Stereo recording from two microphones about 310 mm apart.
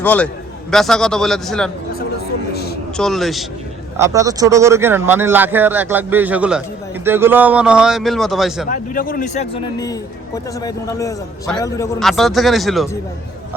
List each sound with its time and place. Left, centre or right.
0.0 s a man's voice: centre
2.5 s a sound: left
3.0 s a man's voice: centre
3.9 s a man's voice: centre
8.7 s a man's voice: left; by 13.0 s centre